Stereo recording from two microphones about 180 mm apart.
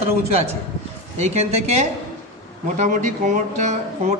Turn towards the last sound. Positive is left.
turn(degrees=-40)  # may be behind; listen again after turning